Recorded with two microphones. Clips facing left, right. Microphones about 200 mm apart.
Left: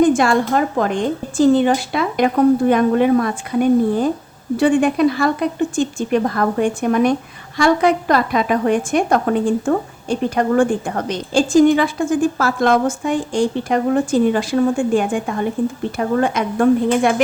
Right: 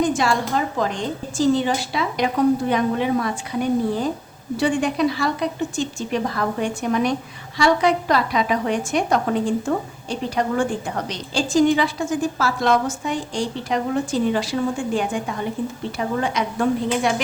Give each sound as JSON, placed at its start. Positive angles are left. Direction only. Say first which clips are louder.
{"t": 0.0, "sound": "a woman's voice", "louder": "left 6 dB", "side_deg": 55}